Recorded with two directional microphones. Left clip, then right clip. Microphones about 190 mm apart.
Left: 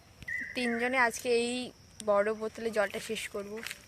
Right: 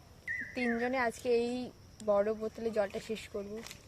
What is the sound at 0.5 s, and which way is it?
Speech, 5° left (ahead or behind).